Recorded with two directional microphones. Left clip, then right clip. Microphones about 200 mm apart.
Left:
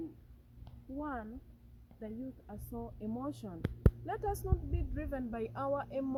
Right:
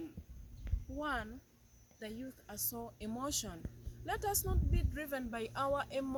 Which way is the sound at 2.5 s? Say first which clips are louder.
Right 4 dB; 20° right (ahead or behind).